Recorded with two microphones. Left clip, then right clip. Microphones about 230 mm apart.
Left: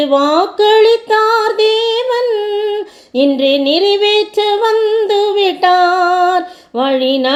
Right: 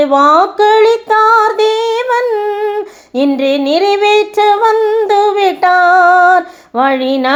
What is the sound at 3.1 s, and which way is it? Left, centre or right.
Female singing, centre.